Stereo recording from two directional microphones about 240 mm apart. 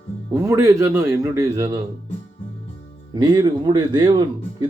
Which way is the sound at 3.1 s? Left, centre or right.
Centre.